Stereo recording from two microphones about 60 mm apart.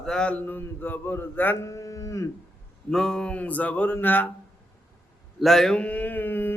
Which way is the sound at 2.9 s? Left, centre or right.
Centre.